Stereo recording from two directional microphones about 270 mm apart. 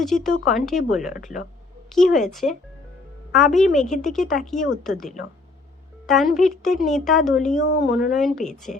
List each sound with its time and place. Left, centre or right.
0.0 s a woman's voice: centre
7.5 s speech: left
8.1 s a woman's voice: centre